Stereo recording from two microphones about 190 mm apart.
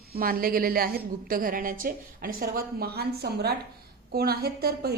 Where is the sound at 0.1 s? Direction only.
50° right (ahead or behind).